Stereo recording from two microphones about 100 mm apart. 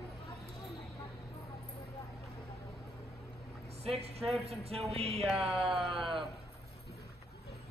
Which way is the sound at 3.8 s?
90° right.